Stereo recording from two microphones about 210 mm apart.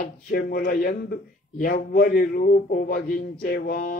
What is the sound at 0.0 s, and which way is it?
Speech, 40° left (ahead or behind).